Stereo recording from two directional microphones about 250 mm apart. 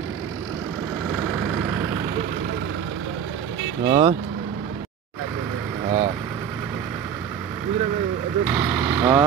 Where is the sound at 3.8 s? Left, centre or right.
Centre.